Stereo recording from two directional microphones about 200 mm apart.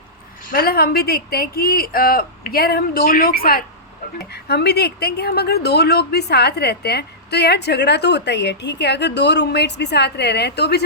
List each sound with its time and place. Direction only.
0.5 s speech: 50° left (ahead or behind)